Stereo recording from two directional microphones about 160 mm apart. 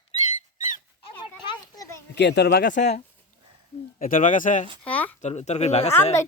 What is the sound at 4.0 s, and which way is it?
Speech, 55° left (ahead or behind).